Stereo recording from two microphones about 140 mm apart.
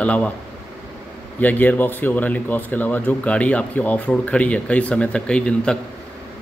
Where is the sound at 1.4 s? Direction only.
10° left (ahead or behind).